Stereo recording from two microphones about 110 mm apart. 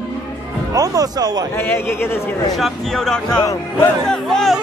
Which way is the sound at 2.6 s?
5° left (ahead or behind).